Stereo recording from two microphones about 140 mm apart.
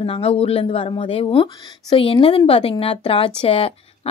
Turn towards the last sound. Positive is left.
turn(degrees=40)  # may be behind; listen again after turning